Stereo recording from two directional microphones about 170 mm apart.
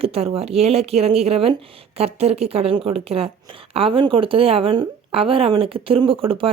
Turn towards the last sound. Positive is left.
turn(degrees=-30)  # may be behind; listen again after turning